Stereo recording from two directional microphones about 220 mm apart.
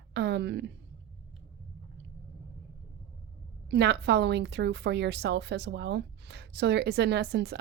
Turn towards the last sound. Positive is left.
turn(degrees=-50)  # may be behind; listen again after turning